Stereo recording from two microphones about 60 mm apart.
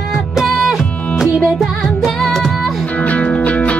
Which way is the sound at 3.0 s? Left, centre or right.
Left.